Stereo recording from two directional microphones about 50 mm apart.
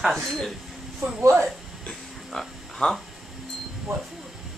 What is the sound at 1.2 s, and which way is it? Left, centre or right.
Speech, right.